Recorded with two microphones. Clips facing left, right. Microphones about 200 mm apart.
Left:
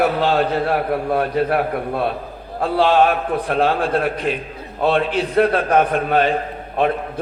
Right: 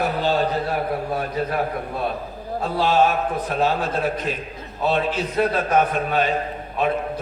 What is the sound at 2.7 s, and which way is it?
A man's voice, 65° left (ahead or behind).